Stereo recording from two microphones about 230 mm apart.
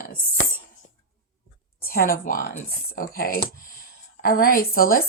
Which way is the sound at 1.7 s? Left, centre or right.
Left.